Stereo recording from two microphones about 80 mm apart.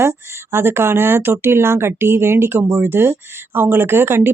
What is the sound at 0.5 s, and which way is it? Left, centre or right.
Speech, right.